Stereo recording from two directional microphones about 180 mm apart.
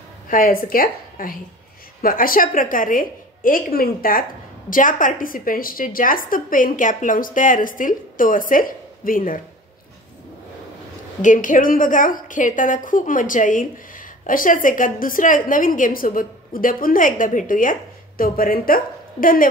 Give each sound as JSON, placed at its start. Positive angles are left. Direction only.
{"t": 0.3, "sound": "a woman's voice", "side_deg": 50}
{"t": 11.2, "sound": "a woman's voice", "side_deg": 45}